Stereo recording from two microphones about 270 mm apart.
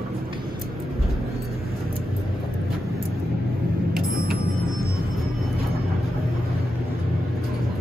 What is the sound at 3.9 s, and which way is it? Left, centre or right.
Vehicle, right.